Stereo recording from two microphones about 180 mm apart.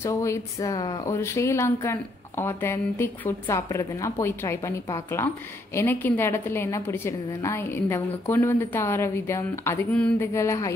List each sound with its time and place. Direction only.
0.0 s speech: 15° left (ahead or behind)